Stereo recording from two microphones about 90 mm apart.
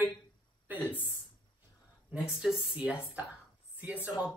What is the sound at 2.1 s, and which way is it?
Speech, 5° right (ahead or behind).